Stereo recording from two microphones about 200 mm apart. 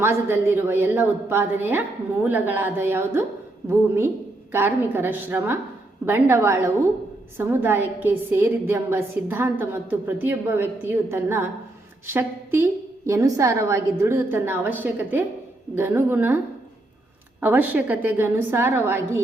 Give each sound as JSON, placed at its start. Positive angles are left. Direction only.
{"t": 0.0, "sound": "a woman's voice", "side_deg": -10}
{"t": 17.4, "sound": "a woman's voice", "side_deg": -10}